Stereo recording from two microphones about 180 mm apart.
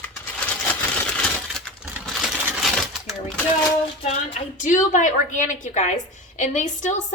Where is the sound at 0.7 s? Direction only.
5° left (ahead or behind).